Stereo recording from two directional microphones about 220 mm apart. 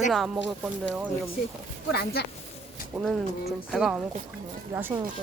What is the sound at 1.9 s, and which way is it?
Speech, 45° left (ahead or behind).